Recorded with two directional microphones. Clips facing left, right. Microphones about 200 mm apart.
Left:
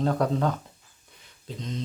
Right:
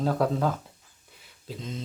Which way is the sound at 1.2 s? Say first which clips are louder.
Left 1 dB; 5° right (ahead or behind).